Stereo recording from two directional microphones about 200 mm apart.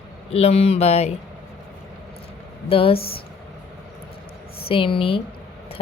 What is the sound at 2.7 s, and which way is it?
Speech, 30° left (ahead or behind).